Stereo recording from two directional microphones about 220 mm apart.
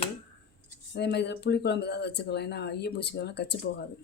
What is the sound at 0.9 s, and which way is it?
Speech, 50° left (ahead or behind).